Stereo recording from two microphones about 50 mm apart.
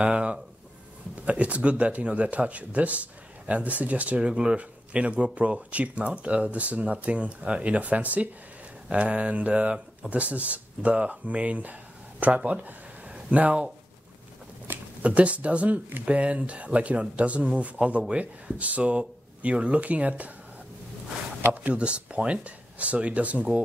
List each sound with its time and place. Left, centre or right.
0.0 s speech: right
4.3 s speech: centre
4.6 s speech: right
14.7 s speech: right
21.5 s speech: right